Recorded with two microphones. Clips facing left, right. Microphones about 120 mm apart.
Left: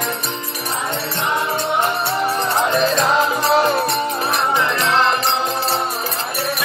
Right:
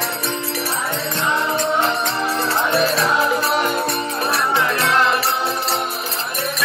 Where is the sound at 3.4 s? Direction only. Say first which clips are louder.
Left 4 dB; 30° left (ahead or behind).